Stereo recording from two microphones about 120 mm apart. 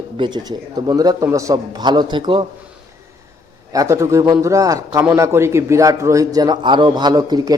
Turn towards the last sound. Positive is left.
turn(degrees=-35)  # may be behind; listen again after turning